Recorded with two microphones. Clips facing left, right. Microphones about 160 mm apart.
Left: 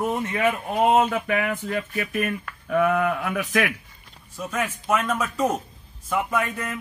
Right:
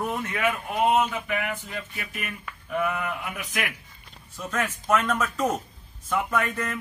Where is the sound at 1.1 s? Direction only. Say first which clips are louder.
Left 5 dB; 45° left (ahead or behind).